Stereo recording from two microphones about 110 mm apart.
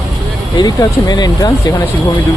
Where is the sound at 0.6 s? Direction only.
35° left (ahead or behind).